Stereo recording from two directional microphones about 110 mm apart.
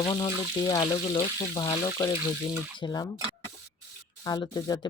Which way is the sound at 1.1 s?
45° left (ahead or behind).